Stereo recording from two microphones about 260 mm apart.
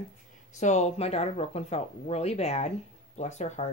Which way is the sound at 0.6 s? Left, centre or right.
Left.